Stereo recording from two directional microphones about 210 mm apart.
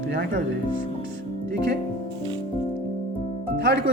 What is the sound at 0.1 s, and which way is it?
Speech, 50° right (ahead or behind).